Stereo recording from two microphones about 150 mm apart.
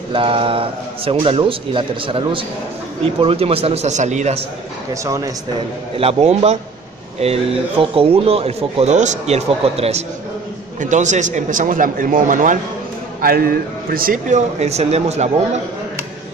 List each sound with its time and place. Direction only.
0.1 s speech: 35° right (ahead or behind); by 4.4 s 50° right (ahead or behind)
5.0 s speech: 20° right (ahead or behind)
5.9 s speech: 40° right (ahead or behind); by 12.5 s 65° right (ahead or behind)
13.2 s speech: 80° right; by 15.6 s 50° right (ahead or behind)